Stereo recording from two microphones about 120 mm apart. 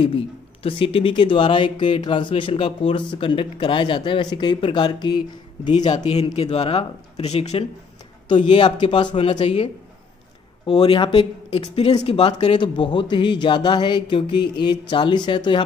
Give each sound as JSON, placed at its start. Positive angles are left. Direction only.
{"t": 0.0, "sound": "speech", "side_deg": 50}
{"t": 5.7, "sound": "speech", "side_deg": 55}
{"t": 8.3, "sound": "speech", "side_deg": 45}
{"t": 10.7, "sound": "speech", "side_deg": 50}